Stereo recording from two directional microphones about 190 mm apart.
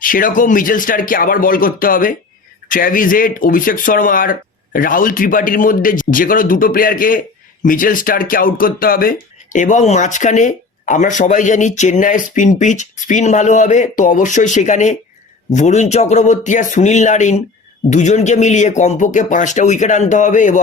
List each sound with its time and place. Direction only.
0.0 s speech: 45° left (ahead or behind)